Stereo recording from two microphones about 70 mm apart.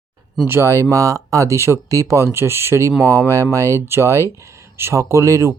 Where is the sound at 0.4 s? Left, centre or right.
Right.